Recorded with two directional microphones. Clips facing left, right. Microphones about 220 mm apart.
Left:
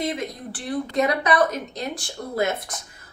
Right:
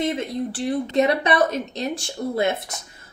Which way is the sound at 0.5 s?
25° right (ahead or behind).